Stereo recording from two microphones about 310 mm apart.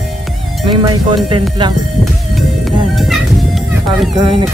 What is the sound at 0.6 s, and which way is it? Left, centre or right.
Speech, centre.